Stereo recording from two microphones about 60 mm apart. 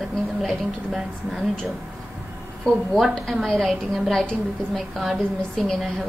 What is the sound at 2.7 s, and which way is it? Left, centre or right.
A woman's voice, centre.